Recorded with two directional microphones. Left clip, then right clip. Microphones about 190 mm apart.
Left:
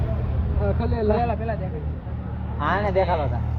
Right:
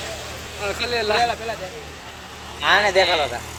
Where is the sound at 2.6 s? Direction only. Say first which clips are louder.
Right 6 dB; 60° right (ahead or behind).